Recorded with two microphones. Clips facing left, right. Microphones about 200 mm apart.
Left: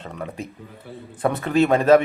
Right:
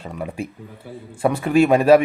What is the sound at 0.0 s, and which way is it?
Speech, 10° right (ahead or behind).